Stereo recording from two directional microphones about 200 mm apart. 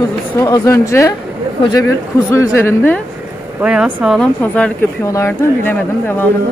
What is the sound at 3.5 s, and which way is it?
Speech, 5° right (ahead or behind).